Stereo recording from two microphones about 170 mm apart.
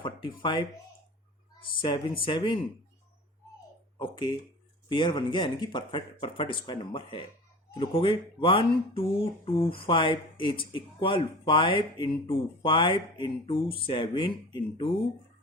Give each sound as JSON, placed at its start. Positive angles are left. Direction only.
{"t": 0.0, "sound": "speech", "side_deg": 30}
{"t": 1.8, "sound": "speech", "side_deg": 30}
{"t": 3.9, "sound": "speech", "side_deg": 30}